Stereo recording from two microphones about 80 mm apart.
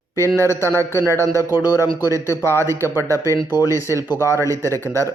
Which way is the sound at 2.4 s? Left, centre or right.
Left.